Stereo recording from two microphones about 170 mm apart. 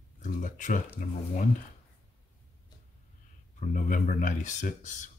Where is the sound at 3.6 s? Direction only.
50° left (ahead or behind).